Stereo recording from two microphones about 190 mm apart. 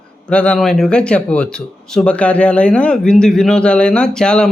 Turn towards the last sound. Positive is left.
turn(degrees=5)  # may be behind; listen again after turning